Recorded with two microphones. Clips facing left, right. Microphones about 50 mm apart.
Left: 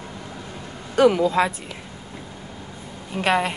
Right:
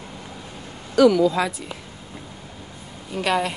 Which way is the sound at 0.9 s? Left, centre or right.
Left.